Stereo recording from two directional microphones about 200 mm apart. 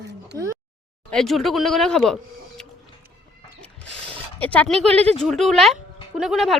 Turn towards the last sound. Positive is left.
turn(degrees=0)  # may be behind; listen again after turning